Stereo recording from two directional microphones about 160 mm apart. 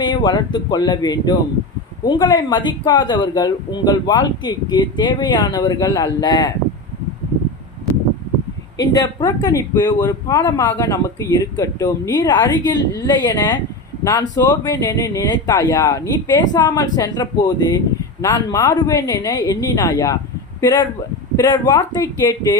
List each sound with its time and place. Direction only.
0.0 s speech: 30° left (ahead or behind)
8.8 s speech: 25° left (ahead or behind)
21.3 s speech: 25° left (ahead or behind)